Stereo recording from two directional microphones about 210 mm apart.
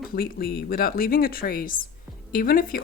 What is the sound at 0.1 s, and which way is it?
Speech, 45° left (ahead or behind).